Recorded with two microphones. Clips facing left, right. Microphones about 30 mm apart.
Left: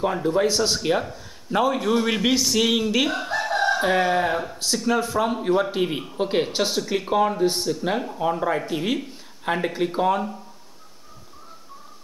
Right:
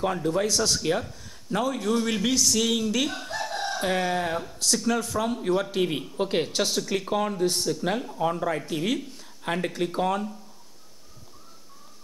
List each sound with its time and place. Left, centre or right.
0.0 s a man's voice: centre